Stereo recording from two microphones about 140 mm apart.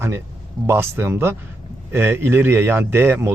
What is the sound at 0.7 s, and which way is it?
Speech, 15° right (ahead or behind).